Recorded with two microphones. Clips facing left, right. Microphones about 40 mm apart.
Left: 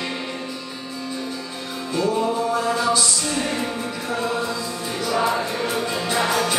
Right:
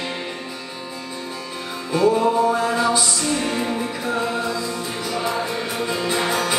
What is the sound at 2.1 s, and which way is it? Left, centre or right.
Music, centre.